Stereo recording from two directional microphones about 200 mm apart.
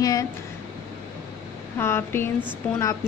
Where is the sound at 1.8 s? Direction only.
10° left (ahead or behind).